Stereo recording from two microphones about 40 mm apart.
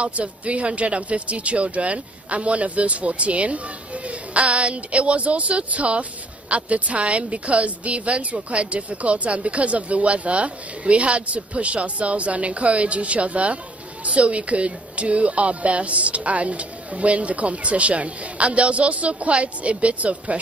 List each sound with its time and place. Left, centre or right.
0.0 s a woman's voice: right